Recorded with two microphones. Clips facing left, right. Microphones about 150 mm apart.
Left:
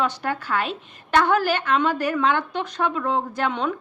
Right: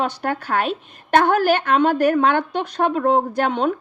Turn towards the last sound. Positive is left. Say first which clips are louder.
# right 6 dB
turn(degrees=-55)  # may be behind; listen again after turning